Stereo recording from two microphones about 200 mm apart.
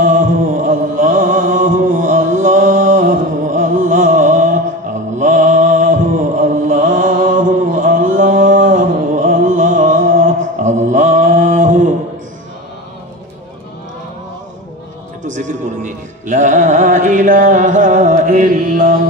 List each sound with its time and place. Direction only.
0.0 s music: 40° right (ahead or behind)
5.2 s mantra: 40° right (ahead or behind)
15.2 s music: 40° right (ahead or behind)